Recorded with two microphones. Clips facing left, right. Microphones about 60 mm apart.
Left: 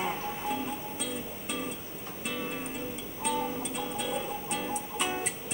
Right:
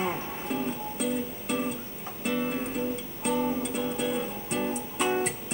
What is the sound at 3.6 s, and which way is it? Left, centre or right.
Music, centre.